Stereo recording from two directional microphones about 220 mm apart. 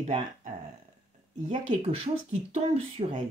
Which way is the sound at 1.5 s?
25° right (ahead or behind).